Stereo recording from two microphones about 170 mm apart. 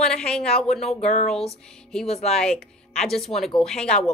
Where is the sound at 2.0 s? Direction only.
40° left (ahead or behind).